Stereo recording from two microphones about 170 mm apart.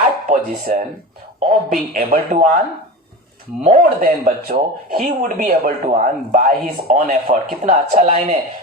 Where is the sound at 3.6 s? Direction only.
45° right (ahead or behind).